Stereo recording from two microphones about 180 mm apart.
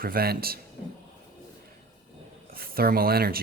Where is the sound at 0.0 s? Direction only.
55° right (ahead or behind).